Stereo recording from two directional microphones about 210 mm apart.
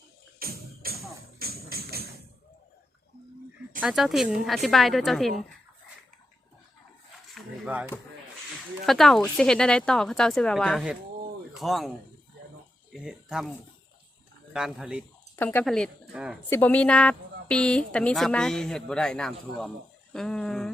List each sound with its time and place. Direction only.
0.3 s music: 45° right (ahead or behind)
3.8 s speech: centre (ahead or behind)
7.3 s a sound: 5° right (ahead or behind)
8.9 s speech: centre (ahead or behind)
12.9 s speech: 5° right (ahead or behind)
14.5 s speech: 5° right (ahead or behind)
16.5 s speech: 10° left (ahead or behind)